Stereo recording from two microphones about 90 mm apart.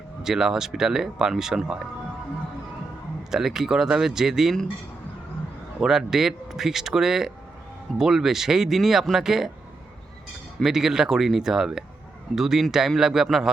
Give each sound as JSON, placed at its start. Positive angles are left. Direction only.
{"t": 0.2, "sound": "speech", "side_deg": -5}
{"t": 3.2, "sound": "speech", "side_deg": -5}
{"t": 5.8, "sound": "speech", "side_deg": -5}
{"t": 10.6, "sound": "speech", "side_deg": -5}